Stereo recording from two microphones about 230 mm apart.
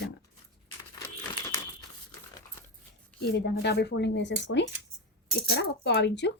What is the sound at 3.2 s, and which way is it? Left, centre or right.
Speech, left.